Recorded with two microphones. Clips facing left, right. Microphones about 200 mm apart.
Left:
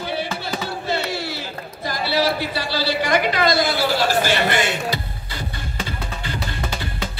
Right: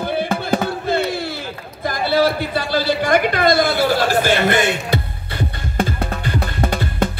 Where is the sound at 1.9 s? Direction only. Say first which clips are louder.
Right 4 dB; 50° right (ahead or behind).